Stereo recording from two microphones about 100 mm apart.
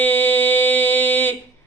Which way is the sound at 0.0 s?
20° left (ahead or behind).